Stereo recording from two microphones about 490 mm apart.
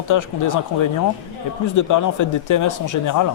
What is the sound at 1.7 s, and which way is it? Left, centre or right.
Speech, left.